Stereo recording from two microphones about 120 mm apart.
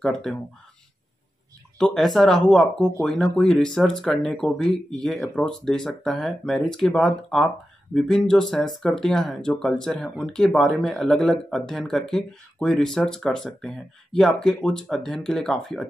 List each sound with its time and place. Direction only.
0.0 s speech: 5° left (ahead or behind)
1.8 s speech: 5° left (ahead or behind)